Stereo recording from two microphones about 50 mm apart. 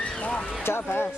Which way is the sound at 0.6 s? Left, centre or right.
Left.